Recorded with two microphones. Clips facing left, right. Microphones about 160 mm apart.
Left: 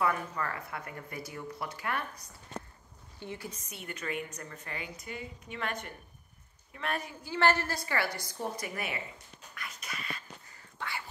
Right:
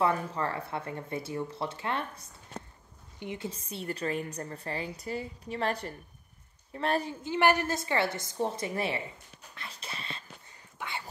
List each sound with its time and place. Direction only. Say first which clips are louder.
0.0 s a woman's voice: right 3 dB; 30° right (ahead or behind)
7.3 s speech: right 2 dB; 15° right (ahead or behind)
9.6 s a sound: even; 30° right (ahead or behind)
10.8 s dog: right 1 dB; 20° right (ahead or behind)